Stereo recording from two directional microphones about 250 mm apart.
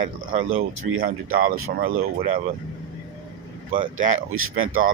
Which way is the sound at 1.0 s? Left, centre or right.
Right.